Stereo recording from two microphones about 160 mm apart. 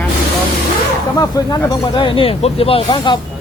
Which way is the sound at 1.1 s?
30° left (ahead or behind).